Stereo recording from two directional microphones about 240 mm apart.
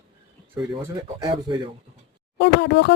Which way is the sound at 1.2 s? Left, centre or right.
Centre.